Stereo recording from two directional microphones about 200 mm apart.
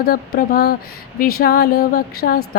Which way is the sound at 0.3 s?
50° left (ahead or behind).